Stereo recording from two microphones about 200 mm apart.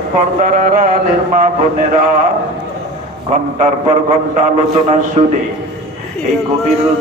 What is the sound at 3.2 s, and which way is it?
Speech, 35° right (ahead or behind).